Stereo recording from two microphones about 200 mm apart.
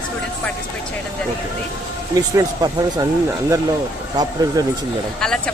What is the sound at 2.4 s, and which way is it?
Speech, 15° right (ahead or behind).